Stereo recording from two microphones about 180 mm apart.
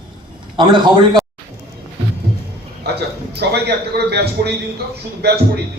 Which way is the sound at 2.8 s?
65° right (ahead or behind).